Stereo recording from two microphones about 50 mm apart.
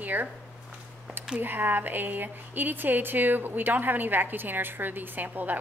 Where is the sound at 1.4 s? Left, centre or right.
Right.